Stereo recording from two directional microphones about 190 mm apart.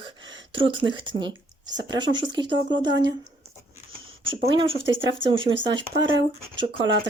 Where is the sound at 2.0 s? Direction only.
80° right.